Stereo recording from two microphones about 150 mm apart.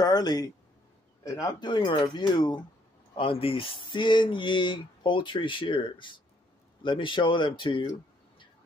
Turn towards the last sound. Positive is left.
turn(degrees=30)  # may be behind; listen again after turning